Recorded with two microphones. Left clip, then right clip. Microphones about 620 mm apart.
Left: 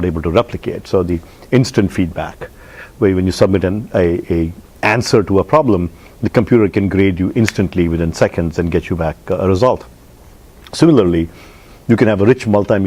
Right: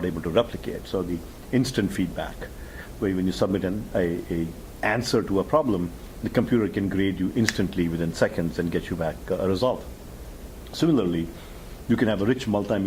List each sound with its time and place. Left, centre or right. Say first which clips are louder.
0.0 s speech: left 9 dB; left